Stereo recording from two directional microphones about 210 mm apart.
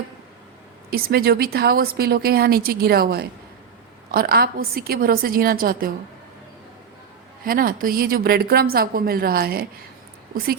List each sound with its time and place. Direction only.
0.9 s a woman's voice: 45° right (ahead or behind)
7.4 s a woman's voice: 45° right (ahead or behind)